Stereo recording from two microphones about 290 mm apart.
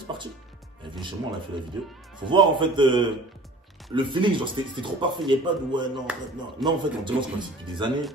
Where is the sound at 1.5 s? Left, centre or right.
Centre.